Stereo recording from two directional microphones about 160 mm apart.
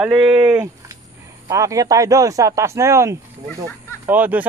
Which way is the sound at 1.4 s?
20° right (ahead or behind).